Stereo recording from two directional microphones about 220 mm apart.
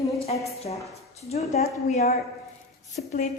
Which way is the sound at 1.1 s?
30° left (ahead or behind).